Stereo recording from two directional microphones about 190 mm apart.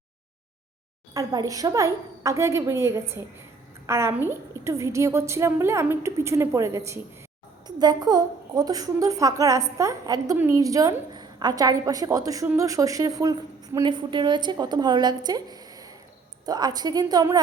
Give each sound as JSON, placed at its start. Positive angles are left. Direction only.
{"t": 1.1, "sound": "a woman's voice", "side_deg": -20}